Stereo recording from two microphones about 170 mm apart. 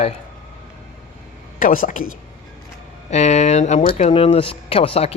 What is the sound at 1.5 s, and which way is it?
Speech, 55° left (ahead or behind).